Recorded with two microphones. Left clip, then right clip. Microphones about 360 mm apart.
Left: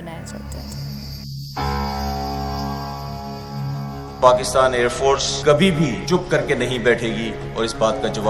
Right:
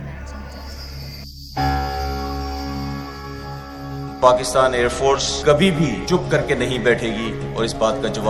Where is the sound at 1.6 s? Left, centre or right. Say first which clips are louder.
Right 4 dB; centre.